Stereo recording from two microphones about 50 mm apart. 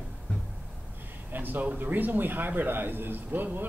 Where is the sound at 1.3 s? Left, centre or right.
Right.